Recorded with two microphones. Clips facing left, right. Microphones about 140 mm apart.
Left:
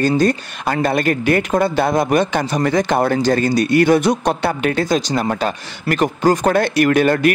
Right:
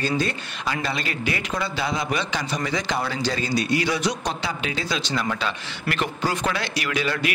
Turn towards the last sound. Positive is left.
turn(degrees=50)  # may be behind; listen again after turning